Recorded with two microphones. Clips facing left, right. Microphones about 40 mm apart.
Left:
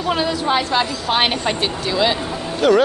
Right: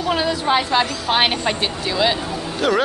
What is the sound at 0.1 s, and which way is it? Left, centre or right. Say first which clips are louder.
A woman's voice: even; centre.